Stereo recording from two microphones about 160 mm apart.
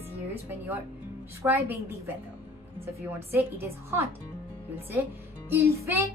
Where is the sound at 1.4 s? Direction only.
15° right (ahead or behind).